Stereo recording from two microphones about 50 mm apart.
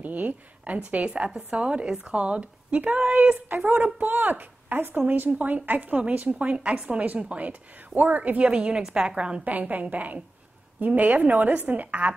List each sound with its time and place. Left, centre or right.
0.0 s a woman's voice: right
9.4 s a woman's voice: right